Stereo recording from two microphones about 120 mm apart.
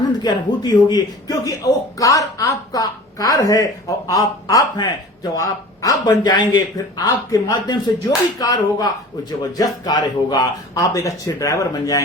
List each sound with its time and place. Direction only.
0.0 s a man's voice: 35° left (ahead or behind)